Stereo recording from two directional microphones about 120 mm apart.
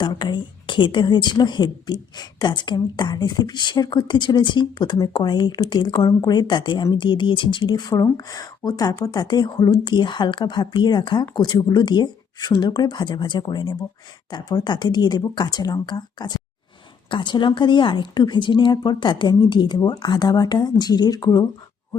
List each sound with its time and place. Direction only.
0.0 s speech: 40° left (ahead or behind)